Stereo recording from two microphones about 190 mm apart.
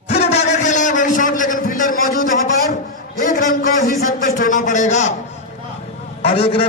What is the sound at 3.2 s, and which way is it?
A man's voice, 45° left (ahead or behind).